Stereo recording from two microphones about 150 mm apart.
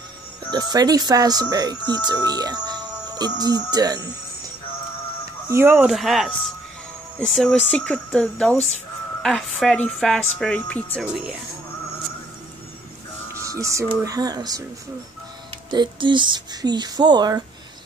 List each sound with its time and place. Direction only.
0.5 s speech: 25° right (ahead or behind)
5.5 s speech: 15° right (ahead or behind)
5.9 s a woman's voice: centre (ahead or behind)
8.5 s speech: 45° left (ahead or behind)
9.2 s a woman's voice: centre (ahead or behind)
11.1 s a woman's voice: 5° right (ahead or behind)
13.3 s music: 20° right (ahead or behind)
14.0 s speech: 25° right (ahead or behind)
15.7 s speech: 30° right (ahead or behind)